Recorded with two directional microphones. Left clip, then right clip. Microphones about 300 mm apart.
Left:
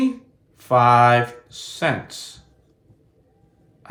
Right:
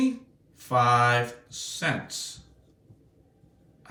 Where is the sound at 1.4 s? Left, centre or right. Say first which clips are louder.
Left 6 dB; centre.